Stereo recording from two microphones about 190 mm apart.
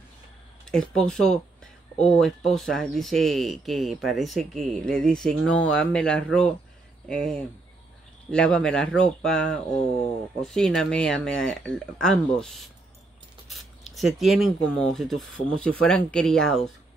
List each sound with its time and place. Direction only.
0.7 s speech: 5° left (ahead or behind)
13.9 s speech: centre (ahead or behind)